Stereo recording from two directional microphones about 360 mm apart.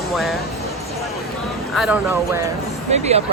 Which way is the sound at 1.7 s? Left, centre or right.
Centre.